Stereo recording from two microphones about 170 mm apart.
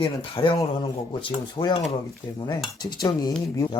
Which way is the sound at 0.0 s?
30° left (ahead or behind).